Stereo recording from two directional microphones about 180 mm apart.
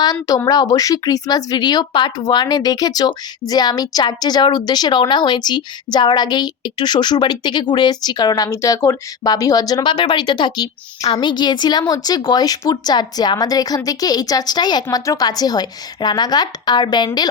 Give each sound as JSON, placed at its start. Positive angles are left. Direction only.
{"t": 0.0, "sound": "a woman's voice", "side_deg": 20}